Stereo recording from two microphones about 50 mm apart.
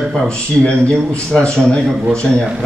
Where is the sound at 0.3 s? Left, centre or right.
Left.